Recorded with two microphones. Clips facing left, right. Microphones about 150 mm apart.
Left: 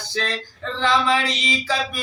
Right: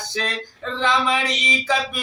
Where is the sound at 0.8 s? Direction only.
20° right (ahead or behind).